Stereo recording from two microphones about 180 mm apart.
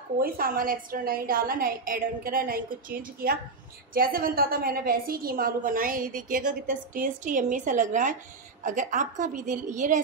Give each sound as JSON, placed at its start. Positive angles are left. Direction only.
{"t": 0.2, "sound": "a woman's voice", "side_deg": -55}